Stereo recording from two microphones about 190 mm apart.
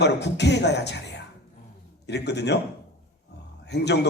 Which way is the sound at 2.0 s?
65° left (ahead or behind).